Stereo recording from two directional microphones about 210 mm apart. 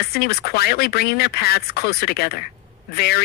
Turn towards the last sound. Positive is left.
turn(degrees=50)  # may be behind; listen again after turning